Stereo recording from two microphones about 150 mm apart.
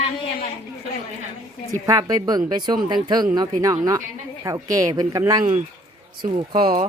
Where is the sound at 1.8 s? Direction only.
25° right (ahead or behind).